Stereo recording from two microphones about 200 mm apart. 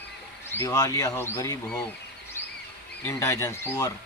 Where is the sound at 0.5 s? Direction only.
15° left (ahead or behind).